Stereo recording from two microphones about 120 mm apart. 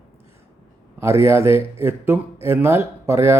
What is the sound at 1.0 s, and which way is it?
Speech, 20° right (ahead or behind).